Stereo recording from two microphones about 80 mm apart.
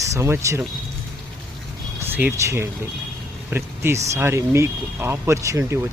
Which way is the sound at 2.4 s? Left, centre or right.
Right.